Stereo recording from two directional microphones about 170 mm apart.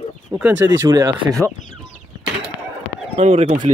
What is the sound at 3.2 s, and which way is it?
Speech, 45° right (ahead or behind).